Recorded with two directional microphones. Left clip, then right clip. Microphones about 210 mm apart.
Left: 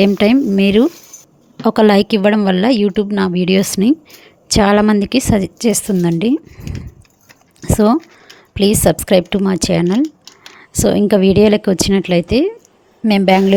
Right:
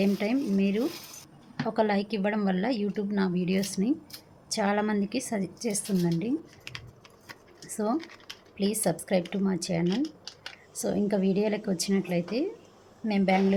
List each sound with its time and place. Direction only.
0.0 s a woman's voice: 50° left (ahead or behind)
7.7 s a woman's voice: 45° left (ahead or behind)